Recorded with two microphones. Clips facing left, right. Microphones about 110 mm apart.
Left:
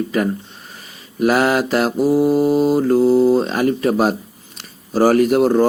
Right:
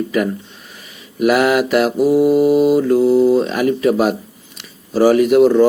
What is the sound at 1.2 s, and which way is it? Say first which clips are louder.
Speech: right 2 dB; 35° left (ahead or behind).